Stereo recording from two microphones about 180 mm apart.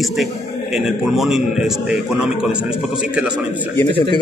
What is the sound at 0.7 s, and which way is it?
A man's voice, centre (ahead or behind).